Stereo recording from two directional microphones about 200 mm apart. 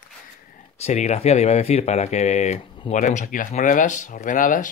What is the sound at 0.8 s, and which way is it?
Speech, 35° left (ahead or behind).